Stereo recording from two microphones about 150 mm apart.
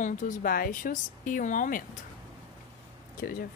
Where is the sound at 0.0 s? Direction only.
60° left (ahead or behind).